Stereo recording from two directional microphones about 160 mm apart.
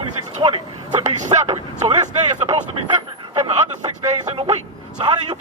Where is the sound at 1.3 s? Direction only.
20° right (ahead or behind).